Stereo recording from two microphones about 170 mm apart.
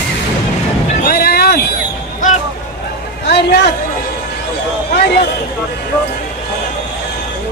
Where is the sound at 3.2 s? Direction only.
80° left.